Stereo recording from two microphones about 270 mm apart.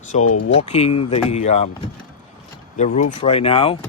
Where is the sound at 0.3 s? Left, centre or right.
Left.